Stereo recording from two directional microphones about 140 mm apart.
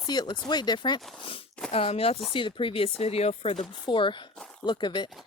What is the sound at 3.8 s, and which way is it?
Speech, 35° left (ahead or behind).